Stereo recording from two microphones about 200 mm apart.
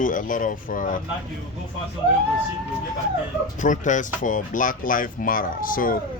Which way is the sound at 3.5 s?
40° left (ahead or behind).